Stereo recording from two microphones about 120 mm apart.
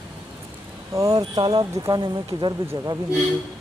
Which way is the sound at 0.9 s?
30° right (ahead or behind).